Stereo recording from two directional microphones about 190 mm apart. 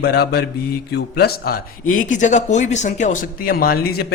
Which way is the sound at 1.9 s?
40° left (ahead or behind).